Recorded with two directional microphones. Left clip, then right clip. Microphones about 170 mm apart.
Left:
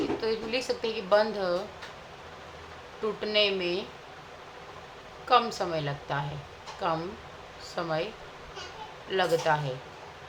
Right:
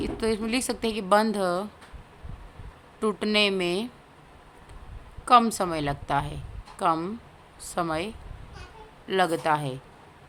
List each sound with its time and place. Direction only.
0.2 s a woman's voice: 60° right (ahead or behind)
3.0 s a woman's voice: 60° right (ahead or behind)
5.2 s a woman's voice: 60° right (ahead or behind)